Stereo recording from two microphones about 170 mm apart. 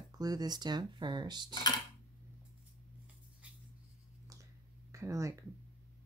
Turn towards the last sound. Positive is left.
turn(degrees=-20)  # may be behind; listen again after turning